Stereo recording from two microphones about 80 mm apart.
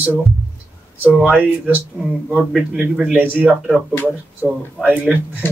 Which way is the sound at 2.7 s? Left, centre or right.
Centre.